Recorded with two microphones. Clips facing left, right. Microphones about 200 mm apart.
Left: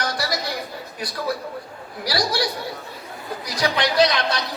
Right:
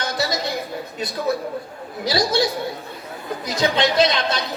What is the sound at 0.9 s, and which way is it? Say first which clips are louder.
Speech: right 3 dB; 25° right (ahead or behind).